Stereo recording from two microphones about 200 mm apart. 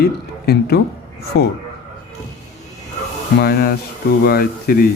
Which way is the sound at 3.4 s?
50° left (ahead or behind).